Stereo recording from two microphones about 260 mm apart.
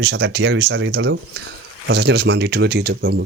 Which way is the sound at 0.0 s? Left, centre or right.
Right.